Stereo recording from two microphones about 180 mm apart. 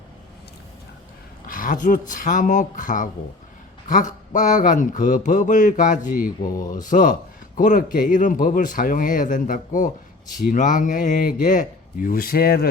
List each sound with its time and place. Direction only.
1.5 s a man's voice: 50° left (ahead or behind)